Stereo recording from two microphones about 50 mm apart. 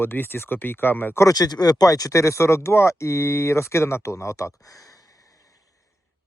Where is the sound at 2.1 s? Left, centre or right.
Left.